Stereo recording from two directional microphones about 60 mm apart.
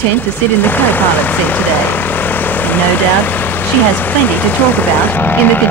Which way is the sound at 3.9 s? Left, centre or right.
Left.